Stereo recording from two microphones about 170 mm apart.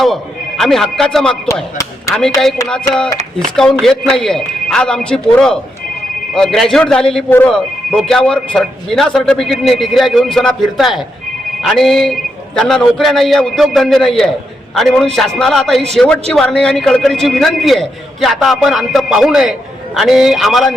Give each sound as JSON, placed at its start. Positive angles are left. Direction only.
{"t": 0.0, "sound": "speech", "side_deg": 0}
{"t": 2.1, "sound": "speech", "side_deg": 20}
{"t": 2.6, "sound": "speech", "side_deg": 5}